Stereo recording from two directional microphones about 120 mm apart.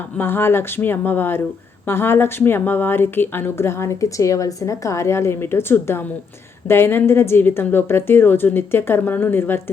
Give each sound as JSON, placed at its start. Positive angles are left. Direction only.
{"t": 0.2, "sound": "speech", "side_deg": 20}